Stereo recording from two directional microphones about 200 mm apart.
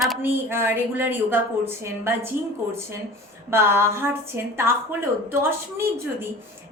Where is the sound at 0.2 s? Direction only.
10° right (ahead or behind).